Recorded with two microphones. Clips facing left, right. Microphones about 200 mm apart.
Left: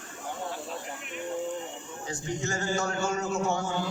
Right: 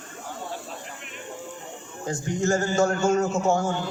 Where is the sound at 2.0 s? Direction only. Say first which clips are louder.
Right 8 dB; 45° right (ahead or behind).